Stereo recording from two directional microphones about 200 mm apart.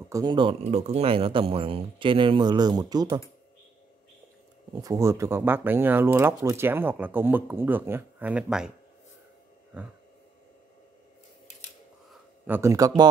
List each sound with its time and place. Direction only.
0.1 s speech: 20° right (ahead or behind)
4.8 s speech: 15° right (ahead or behind)
9.7 s speech: 5° right (ahead or behind)
12.1 s a sound: 10° right (ahead or behind)